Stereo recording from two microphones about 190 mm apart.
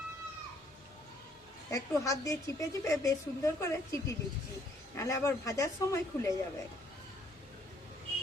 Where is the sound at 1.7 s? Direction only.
15° left (ahead or behind).